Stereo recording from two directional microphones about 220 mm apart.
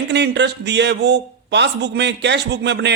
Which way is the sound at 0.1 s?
50° right (ahead or behind).